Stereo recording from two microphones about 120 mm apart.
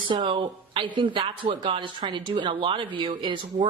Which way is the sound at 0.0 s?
45° right (ahead or behind).